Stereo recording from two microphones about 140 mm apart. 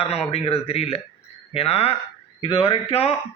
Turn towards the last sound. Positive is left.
turn(degrees=45)  # may be behind; listen again after turning